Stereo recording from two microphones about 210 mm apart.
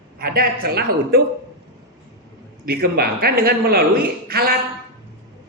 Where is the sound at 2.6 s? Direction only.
45° right (ahead or behind).